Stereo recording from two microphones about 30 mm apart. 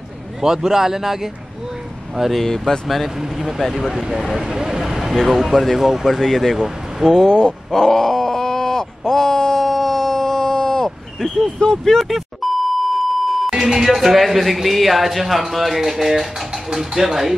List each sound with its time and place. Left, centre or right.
0.4 s speech: centre
2.3 s speech: centre
3.2 s speech: centre
7.2 s speech: left
7.7 s groan: centre
11.4 s speech: left
11.8 s speech: centre
12.4 s beep: centre
13.5 s music: centre
13.8 s speech: centre